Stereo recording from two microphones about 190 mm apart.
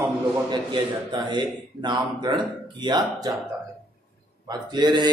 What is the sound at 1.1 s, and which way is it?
Speech, 25° right (ahead or behind).